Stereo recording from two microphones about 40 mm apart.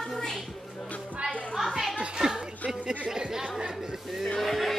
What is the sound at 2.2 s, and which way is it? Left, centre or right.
Music, centre.